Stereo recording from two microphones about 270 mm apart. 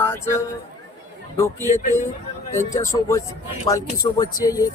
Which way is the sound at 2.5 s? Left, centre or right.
Centre.